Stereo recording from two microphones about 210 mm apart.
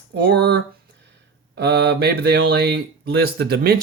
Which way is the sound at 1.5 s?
55° right (ahead or behind).